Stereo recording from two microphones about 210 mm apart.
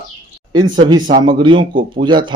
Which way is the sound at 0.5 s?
20° right (ahead or behind).